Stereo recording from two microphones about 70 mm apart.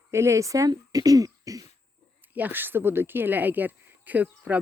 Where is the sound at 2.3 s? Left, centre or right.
Right.